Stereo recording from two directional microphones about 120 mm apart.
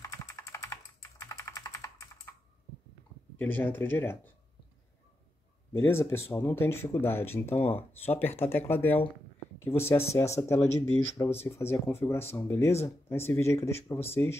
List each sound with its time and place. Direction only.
0.0 s computer keyboard: 25° left (ahead or behind)
1.2 s typing: 25° left (ahead or behind)
3.3 s speech: 15° left (ahead or behind)
5.7 s speech: 20° left (ahead or behind)